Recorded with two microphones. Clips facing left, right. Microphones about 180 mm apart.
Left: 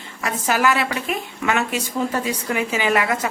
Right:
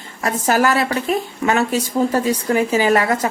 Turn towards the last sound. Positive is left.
turn(degrees=-35)  # may be behind; listen again after turning